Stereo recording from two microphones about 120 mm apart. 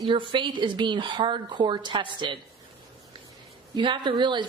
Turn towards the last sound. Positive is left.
turn(degrees=-40)  # may be behind; listen again after turning